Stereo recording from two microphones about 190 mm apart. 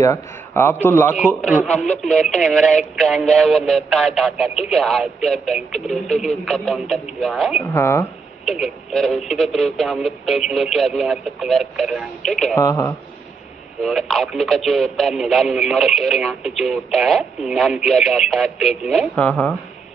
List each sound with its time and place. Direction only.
0.0 s a man's voice: 15° left (ahead or behind)
1.2 s speech: 5° right (ahead or behind)
1.7 s speech: 5° left (ahead or behind)
7.6 s speech: 15° left (ahead or behind)
8.5 s speech: centre (ahead or behind)
12.5 s speech: 15° left (ahead or behind)
13.8 s speech: centre (ahead or behind)